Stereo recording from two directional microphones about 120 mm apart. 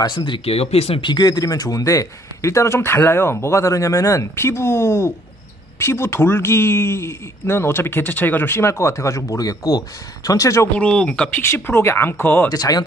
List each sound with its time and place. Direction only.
0.0 s speech: 40° left (ahead or behind)
0.6 s speech: 55° left (ahead or behind)
1.1 s a man's voice: 35° left (ahead or behind)
10.8 s speech: 10° left (ahead or behind)
11.4 s a man's voice: 20° left (ahead or behind)
12.4 s speech: 30° left (ahead or behind)